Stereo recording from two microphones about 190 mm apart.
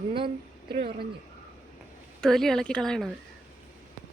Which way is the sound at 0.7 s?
55° right (ahead or behind).